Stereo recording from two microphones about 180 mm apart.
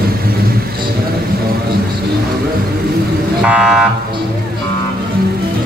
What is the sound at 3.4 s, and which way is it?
Car alarm, 5° right (ahead or behind).